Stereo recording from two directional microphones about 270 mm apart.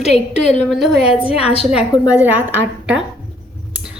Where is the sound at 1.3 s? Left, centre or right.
Left.